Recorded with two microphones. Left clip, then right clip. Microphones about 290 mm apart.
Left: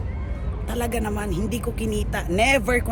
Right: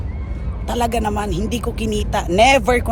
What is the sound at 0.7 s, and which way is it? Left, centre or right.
Speech, centre.